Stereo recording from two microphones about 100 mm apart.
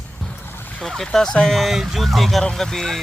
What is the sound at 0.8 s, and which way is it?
Speech, 5° left (ahead or behind).